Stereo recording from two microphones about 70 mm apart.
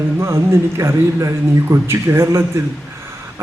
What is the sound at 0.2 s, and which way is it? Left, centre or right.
Speech, right.